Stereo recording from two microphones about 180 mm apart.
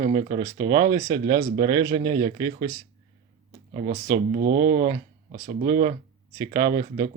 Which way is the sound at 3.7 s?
45° right (ahead or behind).